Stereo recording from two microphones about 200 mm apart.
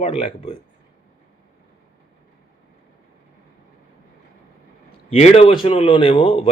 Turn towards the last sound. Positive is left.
turn(degrees=25)  # may be behind; listen again after turning